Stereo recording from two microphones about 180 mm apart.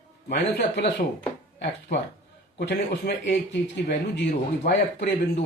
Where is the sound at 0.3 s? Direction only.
70° left (ahead or behind).